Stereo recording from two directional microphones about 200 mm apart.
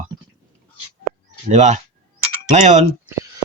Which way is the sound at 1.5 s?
35° right (ahead or behind).